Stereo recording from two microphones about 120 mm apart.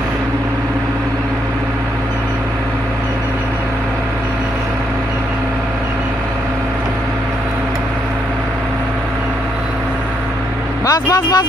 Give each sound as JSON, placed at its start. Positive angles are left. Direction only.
{"t": 10.9, "sound": "speech", "side_deg": 30}